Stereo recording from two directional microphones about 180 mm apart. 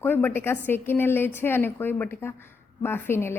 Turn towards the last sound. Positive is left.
turn(degrees=15)  # may be behind; listen again after turning